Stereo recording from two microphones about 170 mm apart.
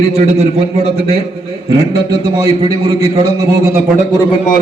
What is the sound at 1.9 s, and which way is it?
A man's voice, 20° right (ahead or behind).